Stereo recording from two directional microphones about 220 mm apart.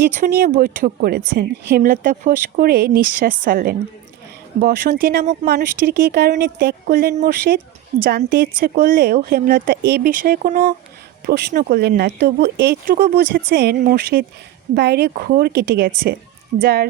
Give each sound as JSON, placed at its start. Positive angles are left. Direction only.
{"t": 0.3, "sound": "speech", "side_deg": -40}